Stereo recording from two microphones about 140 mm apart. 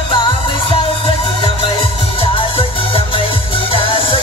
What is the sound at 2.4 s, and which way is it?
Music, 40° left (ahead or behind).